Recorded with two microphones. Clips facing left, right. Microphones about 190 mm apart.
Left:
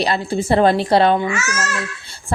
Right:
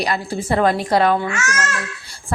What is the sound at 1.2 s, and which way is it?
Speech, 5° left (ahead or behind).